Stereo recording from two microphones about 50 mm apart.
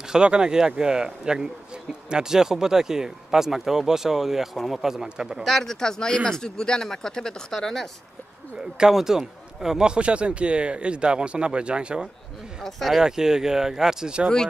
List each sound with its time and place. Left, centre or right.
0.1 s speech: centre
5.4 s speech: centre
8.7 s a man's voice: centre
12.6 s speech: centre
13.0 s speech: centre